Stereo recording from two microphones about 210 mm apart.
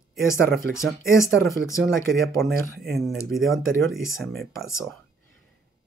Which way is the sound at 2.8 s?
Centre (ahead or behind).